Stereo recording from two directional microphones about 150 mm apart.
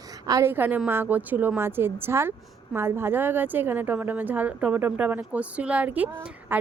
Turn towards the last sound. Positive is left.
turn(degrees=-10)  # may be behind; listen again after turning